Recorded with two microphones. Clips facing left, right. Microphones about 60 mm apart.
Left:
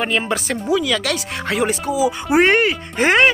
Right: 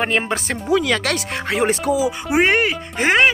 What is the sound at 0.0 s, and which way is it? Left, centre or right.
Speech, right.